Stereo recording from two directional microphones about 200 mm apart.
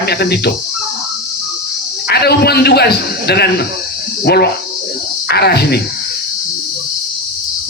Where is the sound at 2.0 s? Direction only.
55° left (ahead or behind).